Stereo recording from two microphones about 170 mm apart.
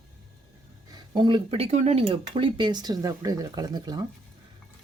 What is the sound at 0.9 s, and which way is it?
Speech, 25° right (ahead or behind).